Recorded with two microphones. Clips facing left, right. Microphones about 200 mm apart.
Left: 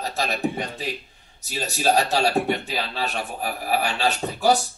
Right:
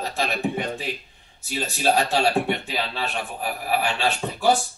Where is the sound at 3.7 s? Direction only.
40° left (ahead or behind).